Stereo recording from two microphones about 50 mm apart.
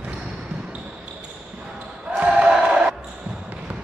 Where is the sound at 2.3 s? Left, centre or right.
Right.